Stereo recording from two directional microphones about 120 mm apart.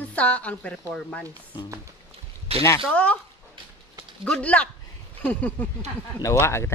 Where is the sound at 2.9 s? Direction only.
10° left (ahead or behind).